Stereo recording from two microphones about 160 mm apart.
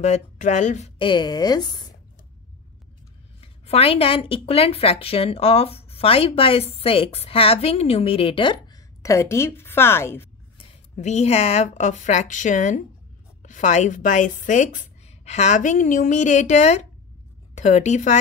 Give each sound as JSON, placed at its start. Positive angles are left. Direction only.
{"t": 0.0, "sound": "a woman's voice", "side_deg": 45}
{"t": 0.9, "sound": "a woman's voice", "side_deg": 30}
{"t": 3.3, "sound": "speech", "side_deg": 40}
{"t": 11.0, "sound": "a woman's voice", "side_deg": 45}